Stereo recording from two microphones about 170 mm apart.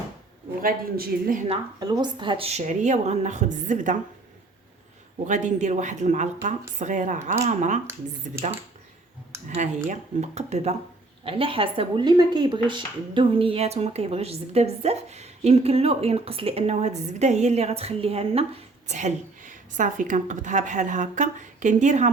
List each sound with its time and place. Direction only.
0.6 s speech: 60° right (ahead or behind)
1.8 s speech: 25° right (ahead or behind); by 3.9 s 45° right (ahead or behind)
5.2 s a woman's voice: 45° right (ahead or behind)
9.5 s speech: 45° right (ahead or behind)